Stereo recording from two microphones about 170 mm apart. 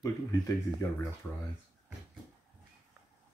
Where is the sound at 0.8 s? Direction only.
20° left (ahead or behind).